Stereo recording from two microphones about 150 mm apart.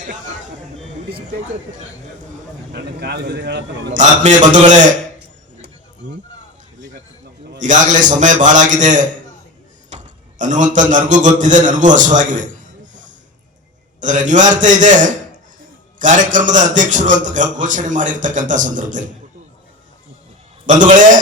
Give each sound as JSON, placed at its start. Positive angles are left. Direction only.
{"t": 3.9, "sound": "a man's voice", "side_deg": -55}
{"t": 7.6, "sound": "a man's voice", "side_deg": -55}
{"t": 20.7, "sound": "a man's voice", "side_deg": -60}